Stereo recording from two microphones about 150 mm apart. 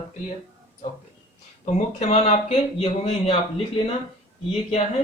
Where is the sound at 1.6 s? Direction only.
45° left (ahead or behind).